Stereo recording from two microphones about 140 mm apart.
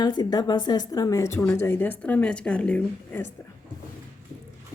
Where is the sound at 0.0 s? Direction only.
30° left (ahead or behind); by 3.2 s 10° left (ahead or behind).